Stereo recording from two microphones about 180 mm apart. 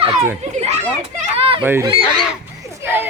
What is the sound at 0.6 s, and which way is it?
Children playing, 40° right (ahead or behind).